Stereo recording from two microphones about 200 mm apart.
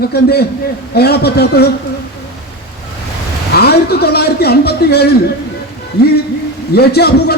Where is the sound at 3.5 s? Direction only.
55° left (ahead or behind).